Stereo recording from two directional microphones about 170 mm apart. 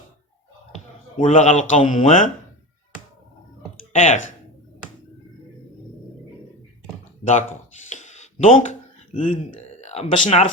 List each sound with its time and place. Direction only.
1.2 s a man's voice: 45° left (ahead or behind)
3.9 s a man's voice: 45° left (ahead or behind)
7.3 s speech: 45° left (ahead or behind)